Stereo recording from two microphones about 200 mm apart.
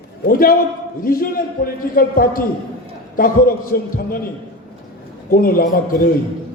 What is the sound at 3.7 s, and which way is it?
Speech, 45° left (ahead or behind).